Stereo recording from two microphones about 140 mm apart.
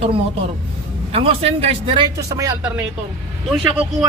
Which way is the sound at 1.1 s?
45° right (ahead or behind).